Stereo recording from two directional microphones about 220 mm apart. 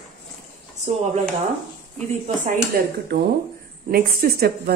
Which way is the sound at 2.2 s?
40° right (ahead or behind).